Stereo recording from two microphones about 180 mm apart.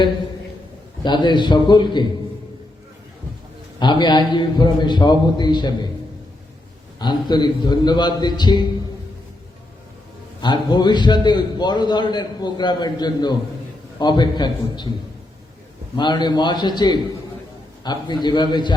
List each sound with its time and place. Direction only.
1.0 s a man's voice: 25° left (ahead or behind)
3.8 s a man's voice: 25° left (ahead or behind)
7.0 s a man's voice: 25° left (ahead or behind)
10.4 s a man's voice: 25° left (ahead or behind)
16.0 s a man's voice: 25° left (ahead or behind)